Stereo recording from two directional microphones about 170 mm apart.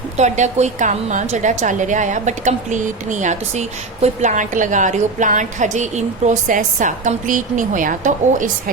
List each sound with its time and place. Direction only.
0.2 s a woman's voice: 45° right (ahead or behind)